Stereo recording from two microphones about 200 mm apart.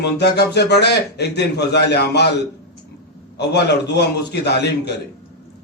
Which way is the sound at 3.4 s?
55° left (ahead or behind).